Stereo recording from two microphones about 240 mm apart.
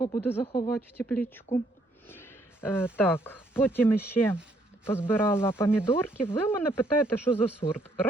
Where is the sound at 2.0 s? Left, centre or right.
Centre.